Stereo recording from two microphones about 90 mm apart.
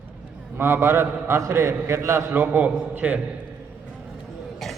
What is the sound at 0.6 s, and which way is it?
A man's voice, 30° right (ahead or behind).